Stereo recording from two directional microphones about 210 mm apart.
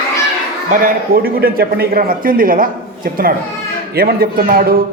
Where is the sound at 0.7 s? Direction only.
40° right (ahead or behind).